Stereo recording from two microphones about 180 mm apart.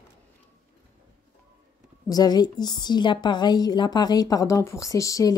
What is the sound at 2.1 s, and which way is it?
A woman's voice, 20° left (ahead or behind).